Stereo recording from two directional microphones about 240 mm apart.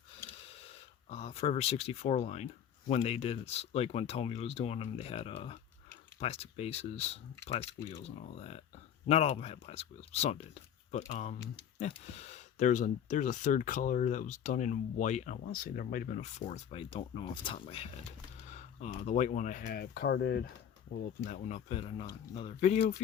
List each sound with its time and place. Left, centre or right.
0.7 s speech: left
21.2 s speech: left